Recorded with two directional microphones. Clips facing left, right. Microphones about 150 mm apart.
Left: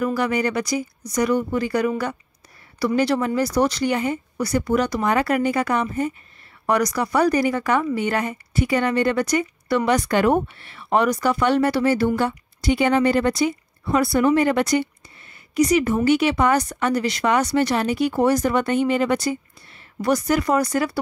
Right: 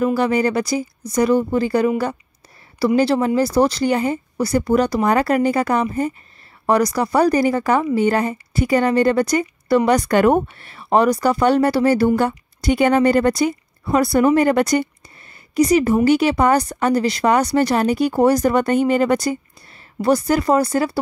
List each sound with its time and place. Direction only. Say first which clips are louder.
0.0 s a woman's voice: right 4 dB; 30° right (ahead or behind)
20.0 s a woman's voice: right 3 dB; 30° right (ahead or behind)